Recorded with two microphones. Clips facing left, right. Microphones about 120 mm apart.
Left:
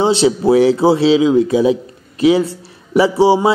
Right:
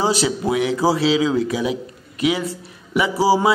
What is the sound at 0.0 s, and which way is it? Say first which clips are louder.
Speech: left 7 dB; 25° left (ahead or behind).